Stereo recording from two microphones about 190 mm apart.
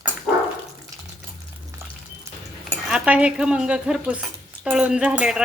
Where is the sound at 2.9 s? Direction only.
5° right (ahead or behind).